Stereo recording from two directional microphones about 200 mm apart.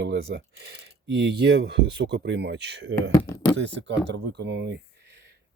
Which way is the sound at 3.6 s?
65° right (ahead or behind).